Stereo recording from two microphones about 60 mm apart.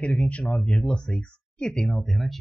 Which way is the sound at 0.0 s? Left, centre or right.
Left.